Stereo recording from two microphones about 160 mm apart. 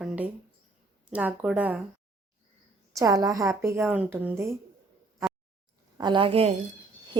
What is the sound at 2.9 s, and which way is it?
A woman's voice, 20° right (ahead or behind).